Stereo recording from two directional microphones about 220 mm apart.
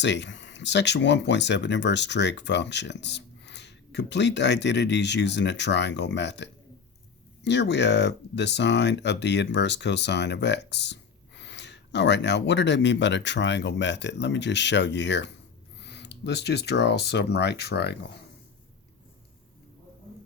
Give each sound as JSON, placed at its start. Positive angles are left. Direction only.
{"t": 0.0, "sound": "speech", "side_deg": 55}